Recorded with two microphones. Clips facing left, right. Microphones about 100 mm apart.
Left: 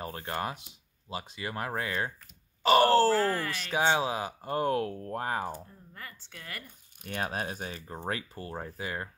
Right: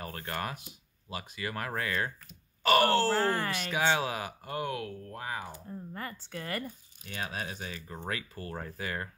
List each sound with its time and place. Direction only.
0.0 s speech: 20° left (ahead or behind)
2.6 s groan: 25° left (ahead or behind)
3.1 s speech: 30° right (ahead or behind)
3.6 s speech: 30° left (ahead or behind)
4.6 s speech: 45° left (ahead or behind)
5.7 s speech: 40° right (ahead or behind)
7.0 s speech: 50° left (ahead or behind); by 8.5 s 30° left (ahead or behind)
8.5 s speech: 20° left (ahead or behind)